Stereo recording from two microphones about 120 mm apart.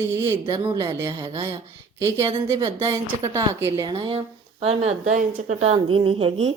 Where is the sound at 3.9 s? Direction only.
45° right (ahead or behind).